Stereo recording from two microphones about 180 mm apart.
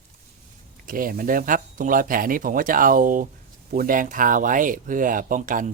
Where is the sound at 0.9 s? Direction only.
50° right (ahead or behind).